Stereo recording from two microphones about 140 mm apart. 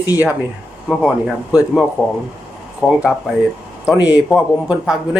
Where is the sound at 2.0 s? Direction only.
20° left (ahead or behind).